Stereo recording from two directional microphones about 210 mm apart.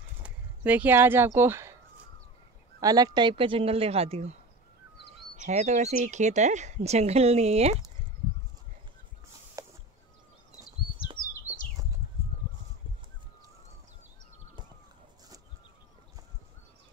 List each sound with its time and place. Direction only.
0.2 s speech: 5° right (ahead or behind)
2.8 s speech: 15° right (ahead or behind)
9.6 s a sound: 15° right (ahead or behind)